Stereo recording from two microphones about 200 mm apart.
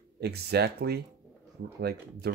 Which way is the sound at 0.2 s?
55° right (ahead or behind).